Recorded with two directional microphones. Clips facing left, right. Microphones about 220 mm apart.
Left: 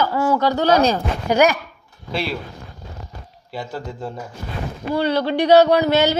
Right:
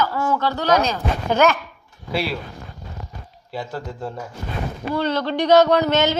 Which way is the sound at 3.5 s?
Centre (ahead or behind).